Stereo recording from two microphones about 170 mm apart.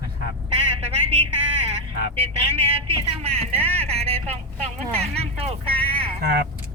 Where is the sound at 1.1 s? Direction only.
35° right (ahead or behind).